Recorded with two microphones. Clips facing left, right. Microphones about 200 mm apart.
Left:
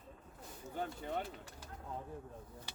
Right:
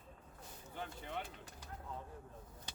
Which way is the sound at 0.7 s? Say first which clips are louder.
Left 5 dB; 40° left (ahead or behind).